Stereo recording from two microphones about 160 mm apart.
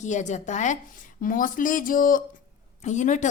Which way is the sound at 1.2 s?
60° left (ahead or behind).